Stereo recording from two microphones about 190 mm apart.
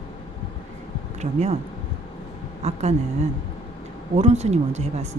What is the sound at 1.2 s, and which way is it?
Speech, 35° right (ahead or behind).